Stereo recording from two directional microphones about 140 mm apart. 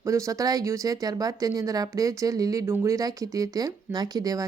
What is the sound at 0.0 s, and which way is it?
Speech, 20° right (ahead or behind).